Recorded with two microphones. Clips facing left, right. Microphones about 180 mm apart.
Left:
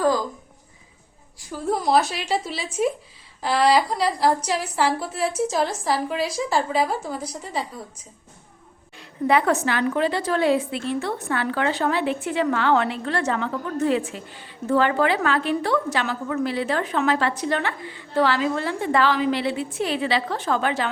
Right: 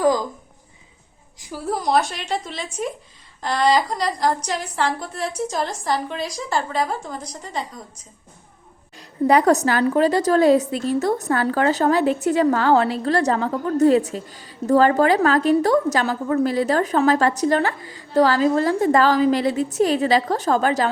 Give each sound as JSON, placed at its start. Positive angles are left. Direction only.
{"t": 1.4, "sound": "a sound", "side_deg": -10}
{"t": 1.6, "sound": "a woman's voice", "side_deg": 0}
{"t": 9.0, "sound": "a woman's voice", "side_deg": -40}